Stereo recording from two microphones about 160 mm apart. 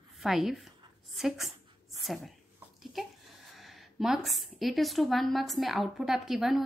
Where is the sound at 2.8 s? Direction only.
Centre (ahead or behind).